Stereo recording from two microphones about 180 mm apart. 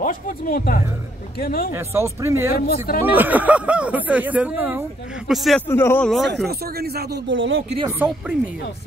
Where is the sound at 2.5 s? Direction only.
55° left (ahead or behind).